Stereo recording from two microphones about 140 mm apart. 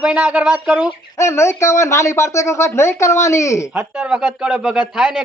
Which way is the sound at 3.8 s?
10° right (ahead or behind).